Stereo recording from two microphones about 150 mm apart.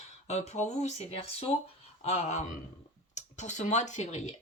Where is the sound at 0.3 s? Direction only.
45° left (ahead or behind).